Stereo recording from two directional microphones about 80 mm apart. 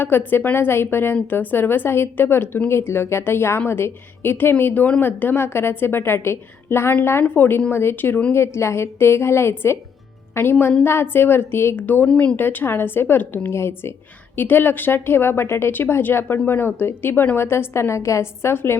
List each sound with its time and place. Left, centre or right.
0.0 s a woman's voice: left
12.0 s speech: centre; by 18.8 s left